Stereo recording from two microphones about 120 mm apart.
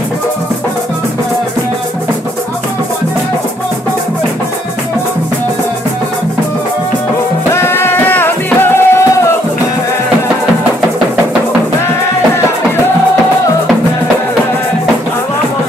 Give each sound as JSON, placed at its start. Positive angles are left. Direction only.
{"t": 7.5, "sound": "music", "side_deg": 20}